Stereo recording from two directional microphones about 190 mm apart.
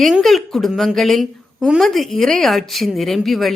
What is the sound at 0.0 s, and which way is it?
A woman's voice, centre (ahead or behind).